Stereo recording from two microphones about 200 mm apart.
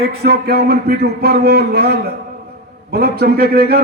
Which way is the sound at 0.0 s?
50° right (ahead or behind).